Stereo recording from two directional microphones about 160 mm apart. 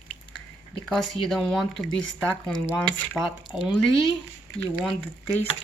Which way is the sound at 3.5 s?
5° right (ahead or behind).